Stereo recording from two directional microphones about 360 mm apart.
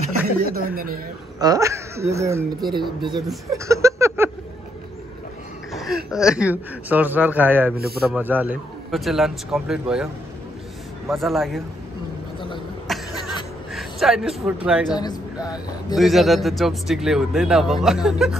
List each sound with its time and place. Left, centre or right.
0.6 s speech: right
1.4 s a man's voice: centre
5.7 s throat clearing: centre
6.0 s a man's voice: centre
7.7 s speech: right
8.0 s a man's voice: centre
11.1 s a man's voice: centre
12.4 s cough: centre
13.1 s a sound: centre
13.7 s a man's voice: centre
14.9 s speech: centre
16.0 s a man's voice: centre